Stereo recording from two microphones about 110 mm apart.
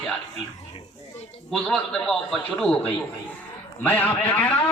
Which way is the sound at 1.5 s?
5° left (ahead or behind).